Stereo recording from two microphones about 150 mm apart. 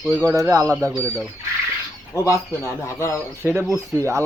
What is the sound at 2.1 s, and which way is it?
Speech, 20° left (ahead or behind).